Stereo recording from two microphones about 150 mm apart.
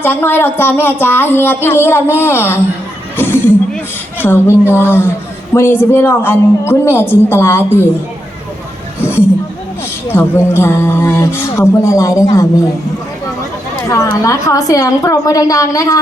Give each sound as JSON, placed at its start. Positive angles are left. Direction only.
{"t": 0.0, "sound": "speech", "side_deg": 15}
{"t": 3.2, "sound": "a sound", "side_deg": 15}
{"t": 4.2, "sound": "speech", "side_deg": 15}
{"t": 9.0, "sound": "a sound", "side_deg": 15}
{"t": 10.1, "sound": "a woman's voice", "side_deg": 15}
{"t": 13.8, "sound": "a woman's voice", "side_deg": 20}